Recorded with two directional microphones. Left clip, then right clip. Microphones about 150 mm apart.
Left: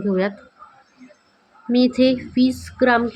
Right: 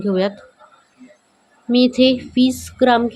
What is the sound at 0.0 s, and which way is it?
Speech, 30° right (ahead or behind).